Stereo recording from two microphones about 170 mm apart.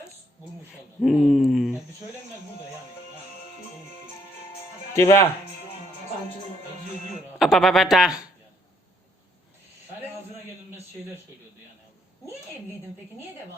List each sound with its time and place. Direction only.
1.0 s a sound: centre (ahead or behind)
4.9 s speech: 15° left (ahead or behind)
7.3 s a man's voice: centre (ahead or behind)